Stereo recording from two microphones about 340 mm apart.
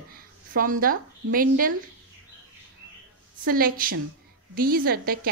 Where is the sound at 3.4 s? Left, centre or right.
Right.